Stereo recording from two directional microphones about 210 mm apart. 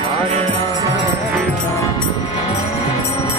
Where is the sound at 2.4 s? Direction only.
30° left (ahead or behind).